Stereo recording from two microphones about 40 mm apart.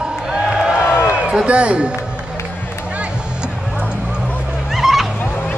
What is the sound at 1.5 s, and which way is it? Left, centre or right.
Speech, right.